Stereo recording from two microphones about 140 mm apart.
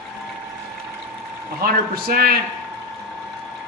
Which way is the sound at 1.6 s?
90° right.